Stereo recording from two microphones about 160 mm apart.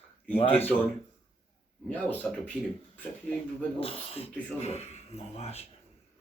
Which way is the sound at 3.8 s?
40° left (ahead or behind).